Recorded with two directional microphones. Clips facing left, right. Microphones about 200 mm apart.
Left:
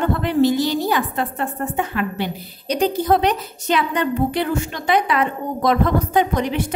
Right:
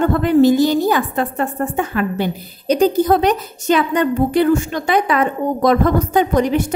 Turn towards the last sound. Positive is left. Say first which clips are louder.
# right 4 dB
turn(degrees=-45)  # may be behind; listen again after turning